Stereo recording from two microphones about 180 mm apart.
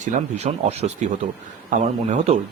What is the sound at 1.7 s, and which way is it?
Speech, 50° right (ahead or behind).